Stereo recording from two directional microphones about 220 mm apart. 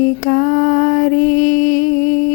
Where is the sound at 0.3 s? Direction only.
40° left (ahead or behind).